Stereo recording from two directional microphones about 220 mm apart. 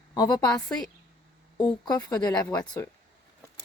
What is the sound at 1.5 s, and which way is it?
Speech, 20° left (ahead or behind).